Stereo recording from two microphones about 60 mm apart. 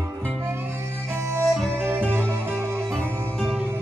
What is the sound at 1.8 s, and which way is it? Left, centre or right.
Music, right.